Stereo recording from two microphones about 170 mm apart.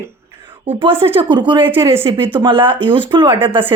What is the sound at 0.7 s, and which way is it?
Speech, 35° right (ahead or behind).